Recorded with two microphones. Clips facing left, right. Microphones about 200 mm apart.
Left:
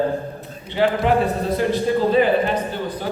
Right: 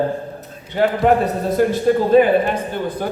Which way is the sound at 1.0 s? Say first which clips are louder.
Right 3 dB; 50° right (ahead or behind).